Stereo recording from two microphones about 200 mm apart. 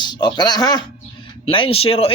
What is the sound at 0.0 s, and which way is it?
Speech, 20° left (ahead or behind).